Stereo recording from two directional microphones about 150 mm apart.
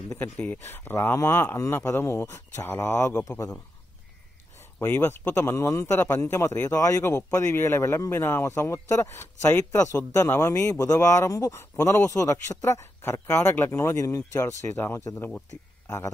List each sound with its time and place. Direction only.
0.1 s a man's voice: 10° left (ahead or behind)
4.7 s a man's voice: 15° left (ahead or behind)